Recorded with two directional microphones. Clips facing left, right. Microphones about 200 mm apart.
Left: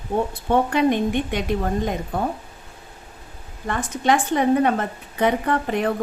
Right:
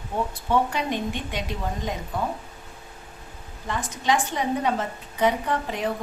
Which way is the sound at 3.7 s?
55° left (ahead or behind).